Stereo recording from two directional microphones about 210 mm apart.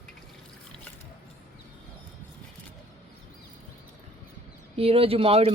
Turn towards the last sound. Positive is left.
turn(degrees=-25)  # may be behind; listen again after turning